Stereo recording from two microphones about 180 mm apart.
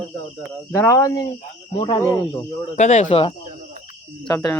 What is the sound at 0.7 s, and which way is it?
Speech, 15° left (ahead or behind).